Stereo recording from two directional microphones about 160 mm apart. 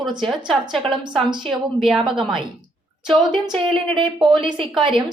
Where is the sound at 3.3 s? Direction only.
30° right (ahead or behind).